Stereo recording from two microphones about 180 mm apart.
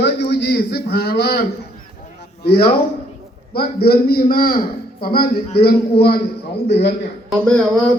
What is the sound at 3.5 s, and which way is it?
A man's voice, 60° left (ahead or behind).